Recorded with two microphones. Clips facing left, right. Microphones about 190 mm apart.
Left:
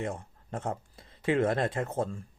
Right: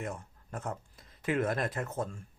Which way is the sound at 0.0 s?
25° left (ahead or behind).